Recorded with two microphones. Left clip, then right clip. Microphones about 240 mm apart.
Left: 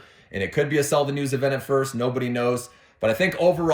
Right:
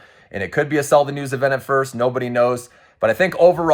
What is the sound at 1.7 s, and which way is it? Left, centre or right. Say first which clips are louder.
Speech: right 4 dB; right.